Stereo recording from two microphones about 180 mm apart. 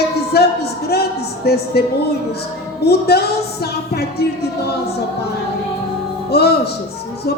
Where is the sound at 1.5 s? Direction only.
60° left (ahead or behind).